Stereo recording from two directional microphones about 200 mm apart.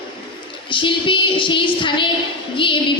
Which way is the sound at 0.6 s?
25° left (ahead or behind).